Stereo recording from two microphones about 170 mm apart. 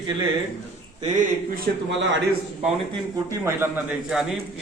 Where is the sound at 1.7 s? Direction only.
55° right (ahead or behind).